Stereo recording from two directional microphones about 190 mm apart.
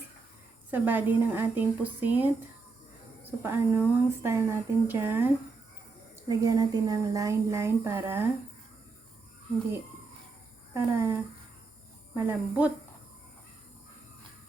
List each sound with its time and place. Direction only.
0.7 s speech: 10° right (ahead or behind)
3.4 s speech: 10° right (ahead or behind)
10.8 s speech: 15° right (ahead or behind)